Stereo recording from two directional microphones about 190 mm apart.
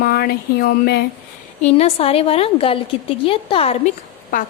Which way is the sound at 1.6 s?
30° left (ahead or behind).